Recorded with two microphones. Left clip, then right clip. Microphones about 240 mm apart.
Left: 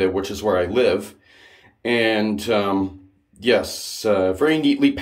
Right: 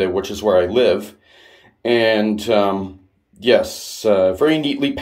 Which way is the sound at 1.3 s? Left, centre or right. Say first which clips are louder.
Right 2 dB; centre.